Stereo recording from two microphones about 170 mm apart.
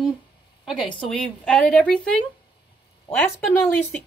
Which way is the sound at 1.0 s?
Centre (ahead or behind).